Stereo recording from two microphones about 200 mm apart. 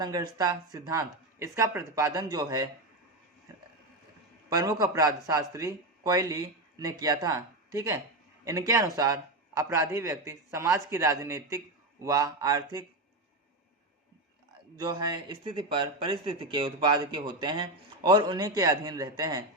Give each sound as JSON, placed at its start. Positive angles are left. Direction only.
{"t": 0.0, "sound": "a man's voice", "side_deg": -20}
{"t": 4.4, "sound": "a man's voice", "side_deg": -15}
{"t": 14.8, "sound": "speech", "side_deg": -20}